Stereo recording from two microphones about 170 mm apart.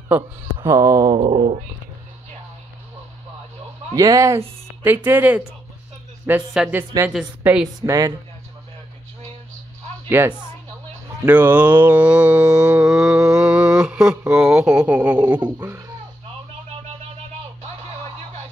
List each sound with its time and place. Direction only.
0.6 s speech: 20° right (ahead or behind)
3.9 s speech: 20° right (ahead or behind)
4.8 s mantra: 10° right (ahead or behind)
7.1 s mantra: 5° right (ahead or behind)
10.0 s a woman's voice: 15° right (ahead or behind)
11.2 s mantra: 10° right (ahead or behind)